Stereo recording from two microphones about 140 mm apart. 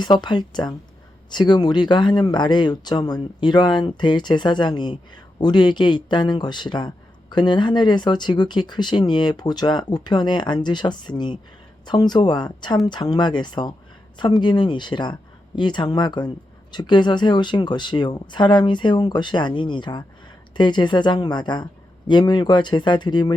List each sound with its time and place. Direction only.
0.0 s speech: 30° left (ahead or behind)